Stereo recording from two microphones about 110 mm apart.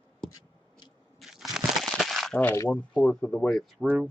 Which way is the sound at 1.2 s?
Centre (ahead or behind).